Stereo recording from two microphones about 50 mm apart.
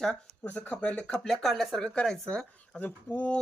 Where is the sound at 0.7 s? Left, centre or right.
Left.